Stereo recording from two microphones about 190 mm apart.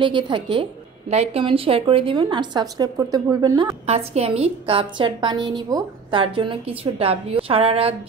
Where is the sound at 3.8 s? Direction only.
35° right (ahead or behind).